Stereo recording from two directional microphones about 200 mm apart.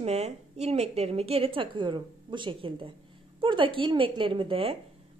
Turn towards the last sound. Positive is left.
turn(degrees=-25)  # may be behind; listen again after turning